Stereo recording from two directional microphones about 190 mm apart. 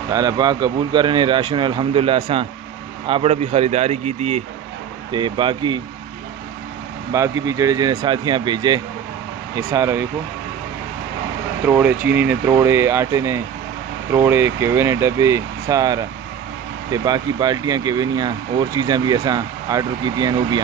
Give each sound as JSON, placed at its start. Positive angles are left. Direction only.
{"t": 0.1, "sound": "speech", "side_deg": -20}
{"t": 5.1, "sound": "speech", "side_deg": -25}
{"t": 7.1, "sound": "speech", "side_deg": -15}
{"t": 11.7, "sound": "speech", "side_deg": -10}